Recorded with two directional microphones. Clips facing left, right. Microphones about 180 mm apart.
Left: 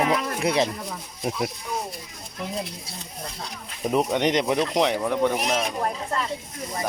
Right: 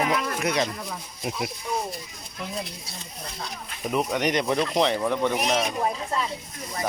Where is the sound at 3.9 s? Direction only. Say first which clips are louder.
Left 3 dB; 30° left (ahead or behind); by 5.9 s centre (ahead or behind).